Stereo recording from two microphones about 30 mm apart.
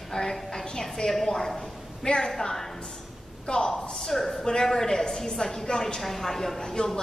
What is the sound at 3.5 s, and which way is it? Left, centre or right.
Speech, left.